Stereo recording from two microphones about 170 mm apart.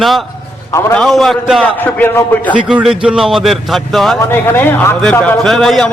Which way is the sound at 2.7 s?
5° right (ahead or behind).